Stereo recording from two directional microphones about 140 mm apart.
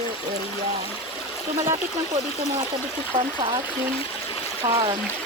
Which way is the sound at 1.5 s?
20° right (ahead or behind).